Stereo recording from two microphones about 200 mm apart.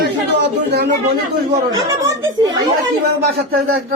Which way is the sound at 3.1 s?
50° right (ahead or behind).